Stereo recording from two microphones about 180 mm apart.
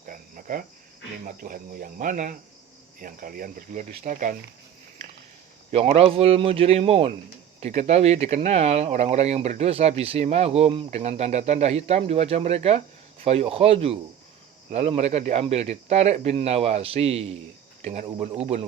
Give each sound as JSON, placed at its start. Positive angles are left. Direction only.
{"t": 0.0, "sound": "cricket", "side_deg": -50}
{"t": 1.2, "sound": "speech", "side_deg": -50}
{"t": 5.7, "sound": "speech", "side_deg": -35}